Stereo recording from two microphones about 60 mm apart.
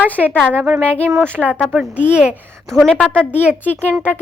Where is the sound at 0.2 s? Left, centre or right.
Left.